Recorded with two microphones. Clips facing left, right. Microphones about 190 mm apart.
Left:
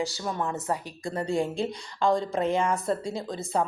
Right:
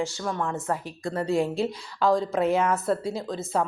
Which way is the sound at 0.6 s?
Centre (ahead or behind).